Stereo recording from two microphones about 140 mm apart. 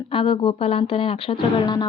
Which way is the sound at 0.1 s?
40° left (ahead or behind).